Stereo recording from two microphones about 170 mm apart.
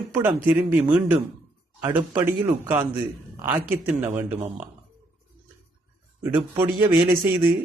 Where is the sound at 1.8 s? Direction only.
10° right (ahead or behind).